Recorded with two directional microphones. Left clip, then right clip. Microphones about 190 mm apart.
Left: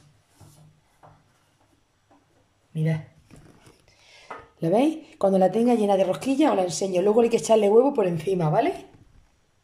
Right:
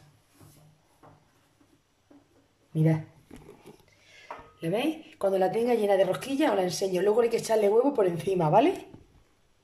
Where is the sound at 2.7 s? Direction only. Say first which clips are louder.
Right 3 dB; 30° right (ahead or behind).